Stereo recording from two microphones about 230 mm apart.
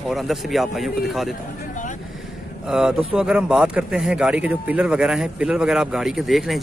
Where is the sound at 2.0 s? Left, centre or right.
Centre.